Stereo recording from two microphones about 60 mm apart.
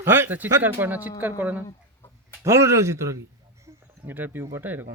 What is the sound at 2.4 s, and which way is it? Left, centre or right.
Speech, right.